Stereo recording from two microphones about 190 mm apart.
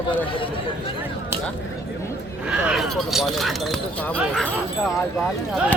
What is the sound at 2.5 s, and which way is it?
Speech, 5° right (ahead or behind).